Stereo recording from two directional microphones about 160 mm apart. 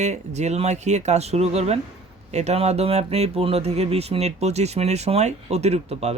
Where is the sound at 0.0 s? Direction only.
45° right (ahead or behind).